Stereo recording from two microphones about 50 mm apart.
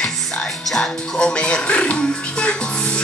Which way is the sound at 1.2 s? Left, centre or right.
Centre.